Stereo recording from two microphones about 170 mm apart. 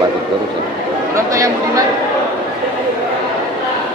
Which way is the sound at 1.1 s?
20° right (ahead or behind).